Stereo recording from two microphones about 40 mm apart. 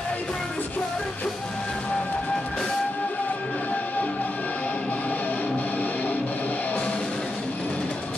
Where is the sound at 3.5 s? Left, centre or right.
Left.